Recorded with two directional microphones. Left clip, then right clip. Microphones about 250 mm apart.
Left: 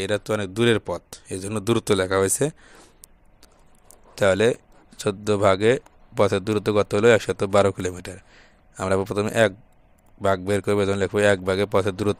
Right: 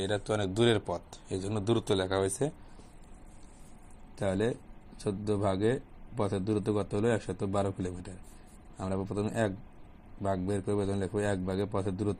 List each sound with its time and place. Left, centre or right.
0.0 s speech: left
4.1 s a man's voice: left